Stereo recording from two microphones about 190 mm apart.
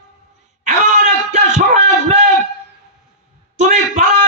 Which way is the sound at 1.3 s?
40° right (ahead or behind).